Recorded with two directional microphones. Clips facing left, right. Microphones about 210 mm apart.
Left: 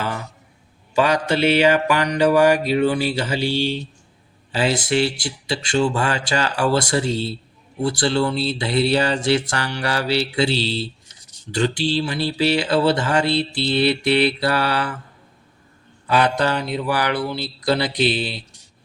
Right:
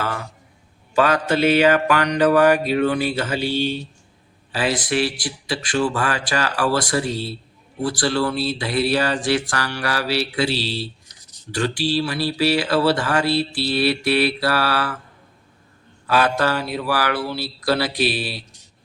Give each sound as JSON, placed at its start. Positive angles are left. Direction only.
{"t": 0.9, "sound": "mantra", "side_deg": 15}
{"t": 4.5, "sound": "mantra", "side_deg": 25}
{"t": 10.5, "sound": "speech", "side_deg": -5}
{"t": 10.8, "sound": "a sound", "side_deg": 25}
{"t": 11.9, "sound": "mantra", "side_deg": 25}
{"t": 16.0, "sound": "mantra", "side_deg": 20}